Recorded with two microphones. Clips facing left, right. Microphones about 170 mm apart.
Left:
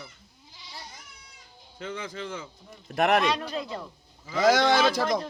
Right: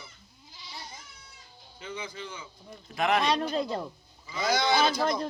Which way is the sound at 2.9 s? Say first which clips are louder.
Left 4 dB; 65° left (ahead or behind).